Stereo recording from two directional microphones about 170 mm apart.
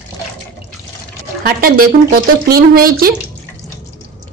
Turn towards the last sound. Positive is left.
turn(degrees=-60)  # may be behind; listen again after turning